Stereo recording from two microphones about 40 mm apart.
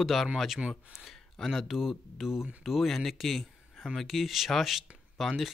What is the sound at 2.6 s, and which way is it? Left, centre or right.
Speech, centre.